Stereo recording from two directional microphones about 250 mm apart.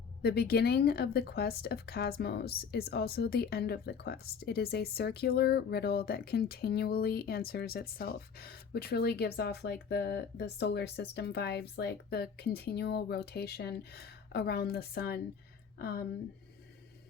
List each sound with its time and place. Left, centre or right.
0.2 s speech: left